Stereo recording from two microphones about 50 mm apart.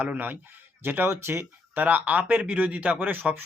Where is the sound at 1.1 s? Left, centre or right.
Right.